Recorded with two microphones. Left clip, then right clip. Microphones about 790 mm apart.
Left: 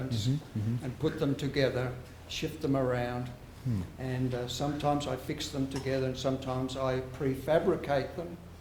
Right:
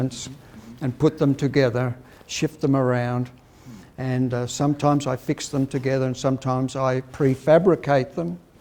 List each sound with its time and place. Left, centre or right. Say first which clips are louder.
0.8 s a man's voice: right 12 dB; right